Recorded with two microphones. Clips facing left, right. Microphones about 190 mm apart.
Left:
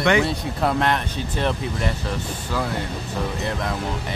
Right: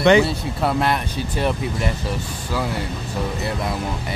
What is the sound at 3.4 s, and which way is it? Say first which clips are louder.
Speech: right 1 dB; 10° right (ahead or behind).